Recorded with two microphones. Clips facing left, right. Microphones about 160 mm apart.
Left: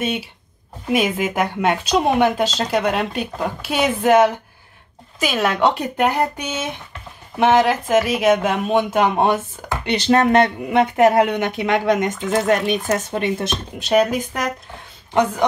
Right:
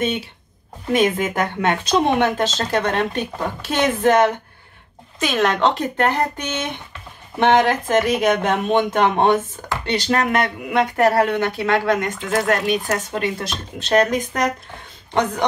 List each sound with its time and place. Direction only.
0.0 s speech: 5° left (ahead or behind)
9.8 s speech: 25° left (ahead or behind)
13.7 s speech: 10° left (ahead or behind)